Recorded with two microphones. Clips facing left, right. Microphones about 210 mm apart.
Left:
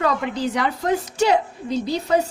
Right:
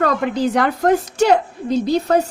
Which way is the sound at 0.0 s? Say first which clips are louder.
Right 4 dB; 50° right (ahead or behind).